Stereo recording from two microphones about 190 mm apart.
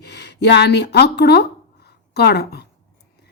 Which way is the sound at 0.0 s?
60° left (ahead or behind).